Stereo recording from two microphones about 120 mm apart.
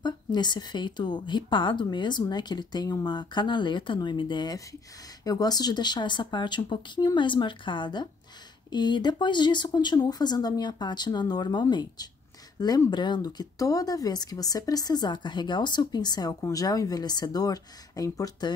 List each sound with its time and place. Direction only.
0.0 s speech: 35° left (ahead or behind)